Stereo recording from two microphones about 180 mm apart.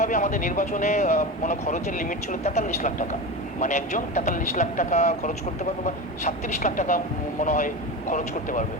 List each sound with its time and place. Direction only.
0.0 s speech: 45° left (ahead or behind)